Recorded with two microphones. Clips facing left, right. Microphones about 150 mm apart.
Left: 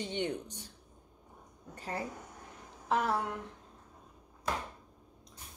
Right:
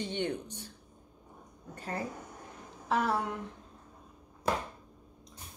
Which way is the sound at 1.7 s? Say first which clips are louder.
Right 1 dB; 20° left (ahead or behind).